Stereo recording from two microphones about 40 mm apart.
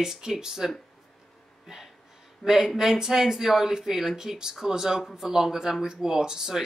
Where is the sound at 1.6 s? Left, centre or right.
Centre.